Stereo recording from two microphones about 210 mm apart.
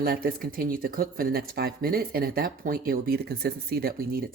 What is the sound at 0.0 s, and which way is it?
Speech, 45° right (ahead or behind).